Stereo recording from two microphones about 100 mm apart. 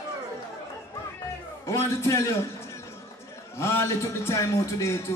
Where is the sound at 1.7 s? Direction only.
25° left (ahead or behind).